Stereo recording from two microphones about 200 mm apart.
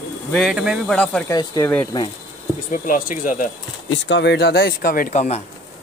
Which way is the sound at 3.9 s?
60° left (ahead or behind).